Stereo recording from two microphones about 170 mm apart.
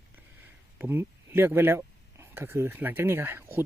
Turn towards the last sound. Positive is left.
turn(degrees=-15)  # may be behind; listen again after turning